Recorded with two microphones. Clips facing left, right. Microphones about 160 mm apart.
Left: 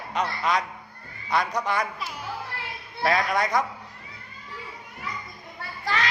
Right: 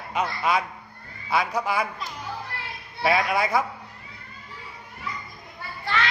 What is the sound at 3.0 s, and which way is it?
Speech, 5° right (ahead or behind).